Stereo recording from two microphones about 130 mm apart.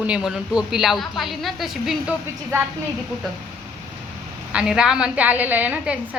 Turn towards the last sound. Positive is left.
turn(degrees=-10)  # may be behind; listen again after turning